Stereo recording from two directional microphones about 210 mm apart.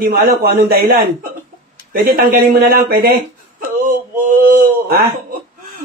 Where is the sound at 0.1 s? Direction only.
50° right (ahead or behind).